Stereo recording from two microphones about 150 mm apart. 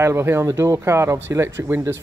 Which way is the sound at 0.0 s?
15° right (ahead or behind).